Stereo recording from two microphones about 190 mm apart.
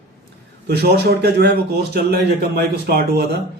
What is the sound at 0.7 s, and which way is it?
A man's voice, 55° right (ahead or behind).